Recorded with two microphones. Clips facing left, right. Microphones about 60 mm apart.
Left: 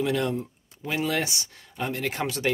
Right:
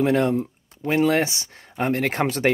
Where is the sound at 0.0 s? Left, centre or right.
Right.